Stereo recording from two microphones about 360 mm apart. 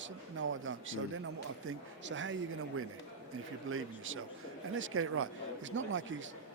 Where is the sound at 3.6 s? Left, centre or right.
Right.